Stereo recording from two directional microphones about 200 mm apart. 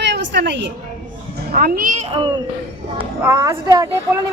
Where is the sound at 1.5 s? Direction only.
45° right (ahead or behind).